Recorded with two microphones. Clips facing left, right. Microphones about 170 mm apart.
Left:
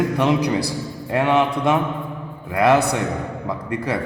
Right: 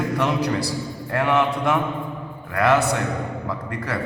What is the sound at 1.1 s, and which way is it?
Mantra, 20° left (ahead or behind).